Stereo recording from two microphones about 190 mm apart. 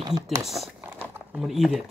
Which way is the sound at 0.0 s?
20° right (ahead or behind).